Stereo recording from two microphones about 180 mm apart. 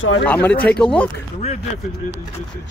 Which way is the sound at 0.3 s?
10° left (ahead or behind).